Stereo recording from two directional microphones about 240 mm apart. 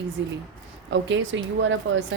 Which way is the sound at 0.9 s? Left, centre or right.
Right.